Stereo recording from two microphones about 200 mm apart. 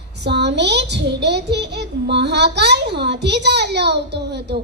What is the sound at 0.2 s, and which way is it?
A child's voice, 60° right (ahead or behind).